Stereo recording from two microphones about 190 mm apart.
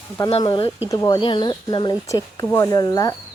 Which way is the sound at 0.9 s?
20° left (ahead or behind).